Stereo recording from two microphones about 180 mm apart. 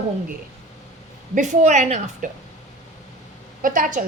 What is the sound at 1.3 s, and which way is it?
Speech, 40° right (ahead or behind).